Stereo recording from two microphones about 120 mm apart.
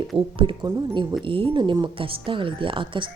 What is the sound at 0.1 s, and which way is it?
Speech, 45° right (ahead or behind).